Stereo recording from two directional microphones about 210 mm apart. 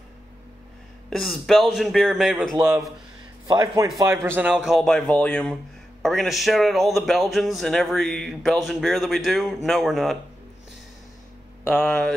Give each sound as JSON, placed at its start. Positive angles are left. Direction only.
{"t": 1.1, "sound": "speech", "side_deg": 0}
{"t": 2.5, "sound": "speech", "side_deg": -10}
{"t": 11.6, "sound": "speech", "side_deg": 5}